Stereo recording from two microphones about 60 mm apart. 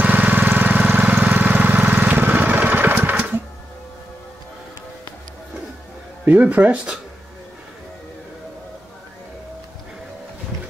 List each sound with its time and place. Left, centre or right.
0.0 s lawn mower: right
6.2 s speech: right